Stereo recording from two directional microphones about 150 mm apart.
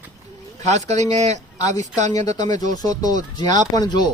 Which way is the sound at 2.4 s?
25° left (ahead or behind).